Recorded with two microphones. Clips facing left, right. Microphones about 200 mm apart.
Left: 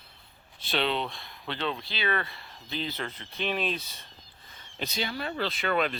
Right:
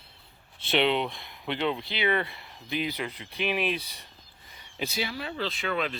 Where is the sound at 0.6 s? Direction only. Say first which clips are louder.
Right 4 dB; 20° right (ahead or behind).